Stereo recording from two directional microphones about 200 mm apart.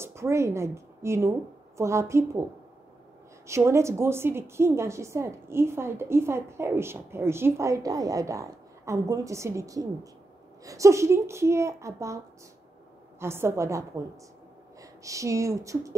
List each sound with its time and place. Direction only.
0.0 s a woman's voice: 15° right (ahead or behind)
3.4 s a woman's voice: 15° right (ahead or behind)
13.2 s a woman's voice: 10° right (ahead or behind)